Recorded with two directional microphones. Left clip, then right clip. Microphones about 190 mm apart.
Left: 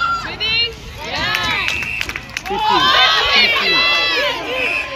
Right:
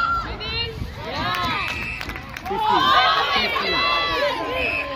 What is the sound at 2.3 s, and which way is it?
Run, 70° right (ahead or behind).